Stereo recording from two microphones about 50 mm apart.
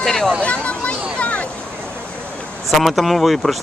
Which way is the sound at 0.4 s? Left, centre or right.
Left.